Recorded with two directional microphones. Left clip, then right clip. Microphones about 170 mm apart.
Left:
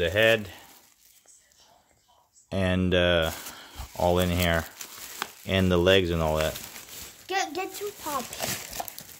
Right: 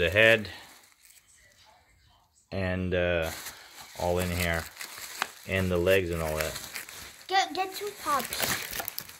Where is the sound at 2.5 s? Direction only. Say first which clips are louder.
Left 5 dB; 45° left (ahead or behind).